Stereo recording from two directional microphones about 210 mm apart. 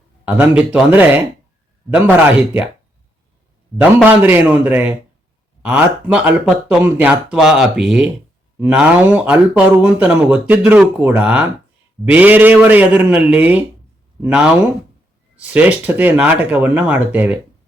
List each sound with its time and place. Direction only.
0.3 s speech: 5° right (ahead or behind)
3.8 s speech: 10° right (ahead or behind)